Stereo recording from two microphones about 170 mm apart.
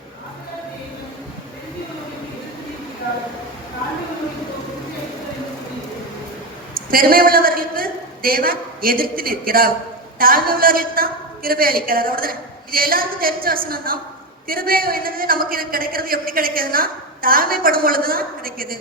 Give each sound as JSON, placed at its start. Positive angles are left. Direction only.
{"t": 6.7, "sound": "a woman's voice", "side_deg": -60}